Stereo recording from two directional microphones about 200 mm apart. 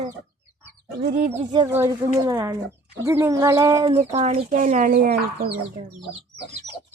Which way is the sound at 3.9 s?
30° right (ahead or behind).